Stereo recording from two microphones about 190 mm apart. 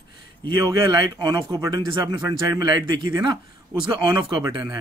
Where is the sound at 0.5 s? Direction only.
25° right (ahead or behind).